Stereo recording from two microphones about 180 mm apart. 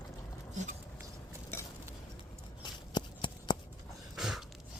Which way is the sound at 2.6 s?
25° left (ahead or behind).